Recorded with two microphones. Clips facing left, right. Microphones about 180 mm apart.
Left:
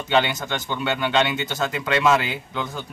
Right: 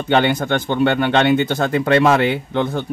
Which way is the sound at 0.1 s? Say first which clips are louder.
Right 6 dB; 55° right (ahead or behind).